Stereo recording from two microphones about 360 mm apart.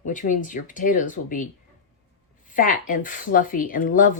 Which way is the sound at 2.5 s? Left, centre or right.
Left.